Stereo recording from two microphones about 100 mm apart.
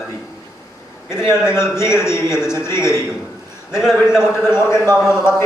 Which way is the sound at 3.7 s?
5° right (ahead or behind).